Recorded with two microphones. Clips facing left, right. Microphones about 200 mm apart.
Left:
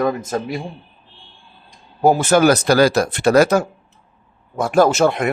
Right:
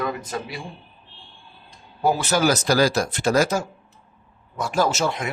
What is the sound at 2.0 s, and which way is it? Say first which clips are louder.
Speech: left 7 dB; 50° left (ahead or behind).